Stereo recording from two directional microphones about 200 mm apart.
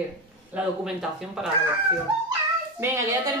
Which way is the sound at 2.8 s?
15° right (ahead or behind).